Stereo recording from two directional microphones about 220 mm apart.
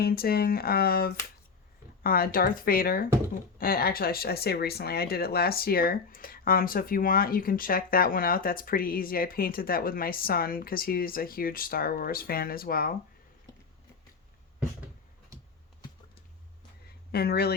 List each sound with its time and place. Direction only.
0.0 s speech: 45° left (ahead or behind)
17.1 s speech: 45° left (ahead or behind)